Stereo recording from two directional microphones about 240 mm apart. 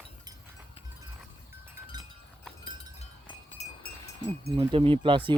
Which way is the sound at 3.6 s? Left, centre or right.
Left.